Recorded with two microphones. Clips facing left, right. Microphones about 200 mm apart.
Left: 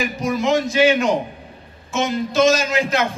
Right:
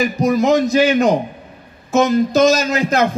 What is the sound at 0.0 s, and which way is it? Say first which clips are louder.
A man's voice: right 6 dB; 40° right (ahead or behind).